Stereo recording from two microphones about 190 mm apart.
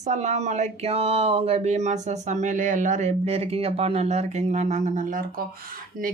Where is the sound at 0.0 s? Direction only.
40° right (ahead or behind).